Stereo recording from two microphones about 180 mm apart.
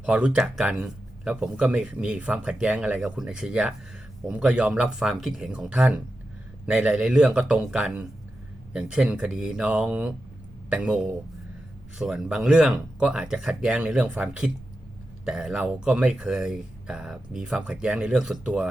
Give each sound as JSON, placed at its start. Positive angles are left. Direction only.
{"t": 0.0, "sound": "speech", "side_deg": -5}